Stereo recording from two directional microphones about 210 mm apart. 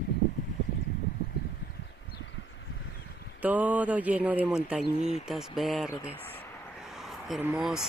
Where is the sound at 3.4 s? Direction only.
10° right (ahead or behind).